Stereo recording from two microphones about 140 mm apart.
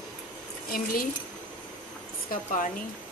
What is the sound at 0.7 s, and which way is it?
Speech, 90° left.